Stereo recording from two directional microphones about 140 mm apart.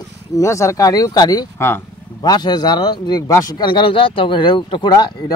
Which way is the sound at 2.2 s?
30° left (ahead or behind).